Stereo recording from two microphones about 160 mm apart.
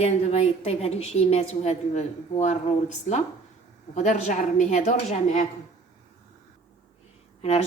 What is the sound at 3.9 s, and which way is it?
A woman's voice, 45° left (ahead or behind).